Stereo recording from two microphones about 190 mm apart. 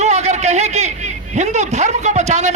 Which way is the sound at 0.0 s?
35° right (ahead or behind).